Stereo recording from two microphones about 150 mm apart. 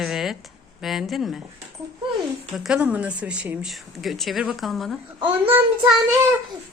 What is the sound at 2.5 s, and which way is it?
Speech, 5° right (ahead or behind).